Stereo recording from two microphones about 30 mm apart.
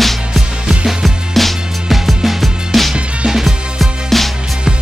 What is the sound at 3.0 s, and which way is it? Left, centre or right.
Music, right.